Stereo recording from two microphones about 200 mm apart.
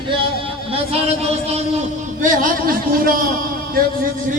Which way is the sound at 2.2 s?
40° right (ahead or behind).